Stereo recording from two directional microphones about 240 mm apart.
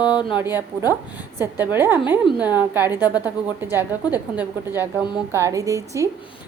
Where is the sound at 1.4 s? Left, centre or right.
Centre.